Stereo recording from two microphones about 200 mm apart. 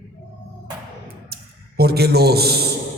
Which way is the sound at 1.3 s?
50° right (ahead or behind).